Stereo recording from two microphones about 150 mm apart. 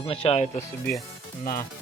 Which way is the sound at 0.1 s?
40° left (ahead or behind).